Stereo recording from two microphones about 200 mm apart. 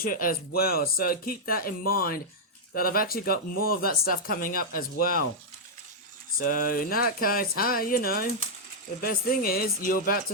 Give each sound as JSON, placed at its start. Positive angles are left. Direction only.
{"t": 0.0, "sound": "speech", "side_deg": 45}
{"t": 6.4, "sound": "speech", "side_deg": 45}